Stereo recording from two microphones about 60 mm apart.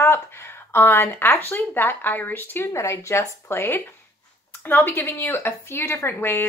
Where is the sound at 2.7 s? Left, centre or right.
Left.